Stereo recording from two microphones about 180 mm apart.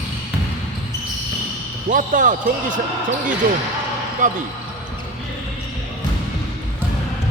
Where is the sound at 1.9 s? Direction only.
45° right (ahead or behind).